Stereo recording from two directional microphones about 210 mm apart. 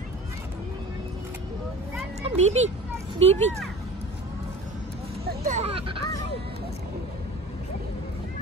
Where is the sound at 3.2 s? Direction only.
30° right (ahead or behind).